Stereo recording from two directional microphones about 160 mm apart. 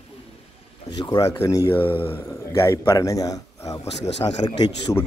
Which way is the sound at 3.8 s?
40° left (ahead or behind).